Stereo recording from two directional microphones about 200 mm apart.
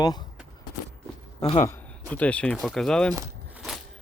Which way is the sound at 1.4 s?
30° left (ahead or behind).